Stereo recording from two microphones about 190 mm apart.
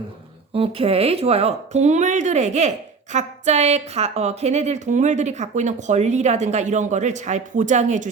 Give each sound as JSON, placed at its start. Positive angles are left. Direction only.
{"t": 0.5, "sound": "speech", "side_deg": -30}